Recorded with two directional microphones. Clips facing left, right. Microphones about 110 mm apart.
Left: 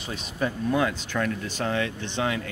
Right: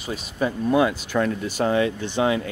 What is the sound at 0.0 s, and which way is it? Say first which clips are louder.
Speech: right 4 dB; 5° right (ahead or behind).